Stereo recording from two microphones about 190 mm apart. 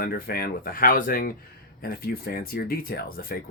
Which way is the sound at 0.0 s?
50° left (ahead or behind).